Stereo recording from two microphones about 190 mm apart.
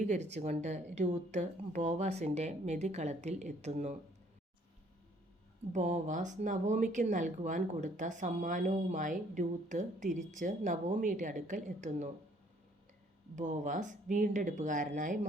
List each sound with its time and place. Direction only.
0.3 s speech: 35° right (ahead or behind)
5.7 s speech: 40° right (ahead or behind)
13.3 s speech: 40° right (ahead or behind)